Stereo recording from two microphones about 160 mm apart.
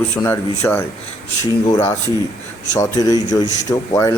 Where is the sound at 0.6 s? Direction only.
15° left (ahead or behind).